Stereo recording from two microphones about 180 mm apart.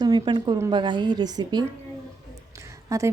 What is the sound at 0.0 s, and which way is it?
A woman's voice, 25° right (ahead or behind).